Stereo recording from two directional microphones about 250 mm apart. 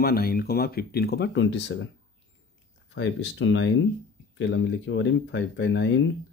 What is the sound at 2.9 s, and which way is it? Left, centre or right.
Speech, left.